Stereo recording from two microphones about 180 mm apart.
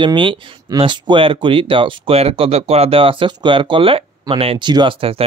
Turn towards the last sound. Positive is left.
turn(degrees=-30)  # may be behind; listen again after turning